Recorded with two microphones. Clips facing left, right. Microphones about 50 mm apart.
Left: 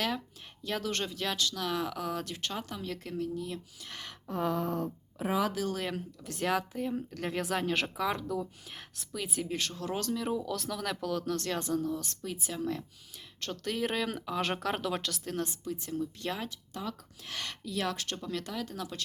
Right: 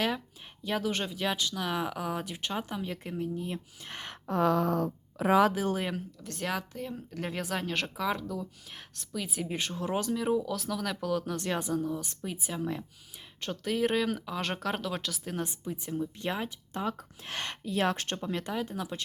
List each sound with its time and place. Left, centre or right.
0.6 s speech: centre; by 4.2 s right
4.3 s a sound: right
5.5 s speech: right
5.9 s a woman's voice: centre
9.5 s speech: centre
11.3 s a woman's voice: centre
15.4 s speech: right